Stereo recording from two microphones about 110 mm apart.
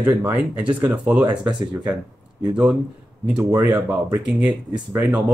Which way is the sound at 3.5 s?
30° right (ahead or behind).